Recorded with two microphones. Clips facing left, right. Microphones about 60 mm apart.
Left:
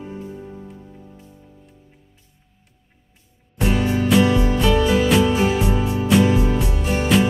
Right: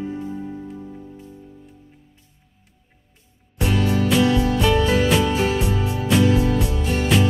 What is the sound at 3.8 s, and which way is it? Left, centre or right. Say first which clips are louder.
Music: left 1 dB; centre.